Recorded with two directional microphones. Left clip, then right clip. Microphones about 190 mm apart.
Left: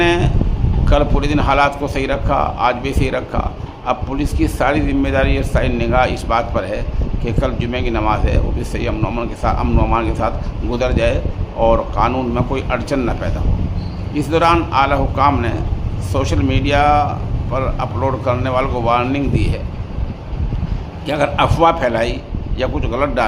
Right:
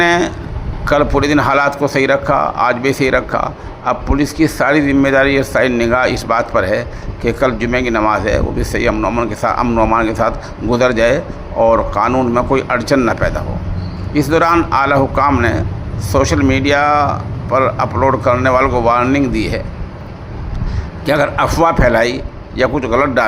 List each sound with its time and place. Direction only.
0.0 s a sound: 20° right (ahead or behind)
0.9 s a man's voice: 20° right (ahead or behind)
9.3 s a man's voice: 25° right (ahead or behind)
21.1 s a man's voice: 20° right (ahead or behind)